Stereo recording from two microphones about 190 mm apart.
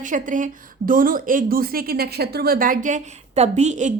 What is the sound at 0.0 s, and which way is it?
Speech, 45° right (ahead or behind).